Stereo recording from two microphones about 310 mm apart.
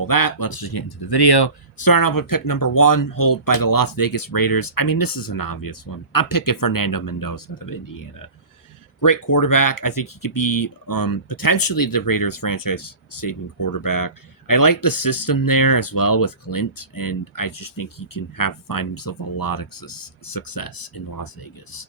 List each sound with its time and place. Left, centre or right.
0.0 s speech: left
1.8 s speech: left
9.0 s speech: left